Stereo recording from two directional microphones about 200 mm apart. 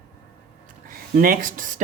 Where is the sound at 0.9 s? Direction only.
45° right (ahead or behind).